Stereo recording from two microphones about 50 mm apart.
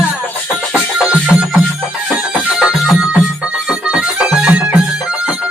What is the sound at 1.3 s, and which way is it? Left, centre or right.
Music, left.